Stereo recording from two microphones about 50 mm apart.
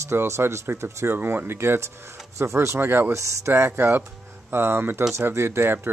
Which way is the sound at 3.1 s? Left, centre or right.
Right.